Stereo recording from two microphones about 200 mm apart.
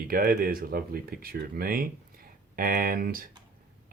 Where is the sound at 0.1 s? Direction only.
45° right (ahead or behind).